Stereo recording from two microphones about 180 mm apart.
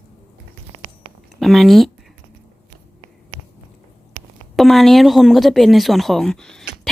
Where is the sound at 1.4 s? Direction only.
Centre (ahead or behind).